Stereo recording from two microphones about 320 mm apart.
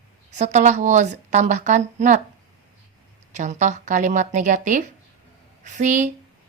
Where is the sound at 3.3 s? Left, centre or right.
Right.